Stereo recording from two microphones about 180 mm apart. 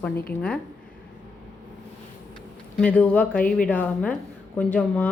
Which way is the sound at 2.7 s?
10° left (ahead or behind).